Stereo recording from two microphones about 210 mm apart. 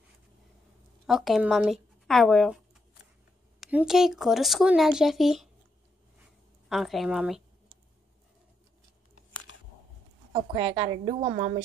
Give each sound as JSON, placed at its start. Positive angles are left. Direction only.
{"t": 1.0, "sound": "speech", "side_deg": 0}
{"t": 3.6, "sound": "speech", "side_deg": 0}
{"t": 6.7, "sound": "speech", "side_deg": 0}
{"t": 10.5, "sound": "a woman's voice", "side_deg": -20}